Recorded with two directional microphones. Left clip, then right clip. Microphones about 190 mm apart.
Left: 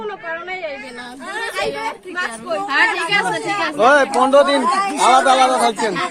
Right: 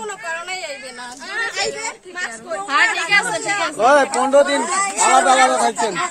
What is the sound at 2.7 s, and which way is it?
Speech, 65° right (ahead or behind).